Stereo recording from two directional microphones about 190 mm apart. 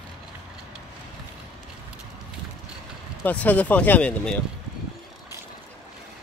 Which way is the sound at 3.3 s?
5° left (ahead or behind).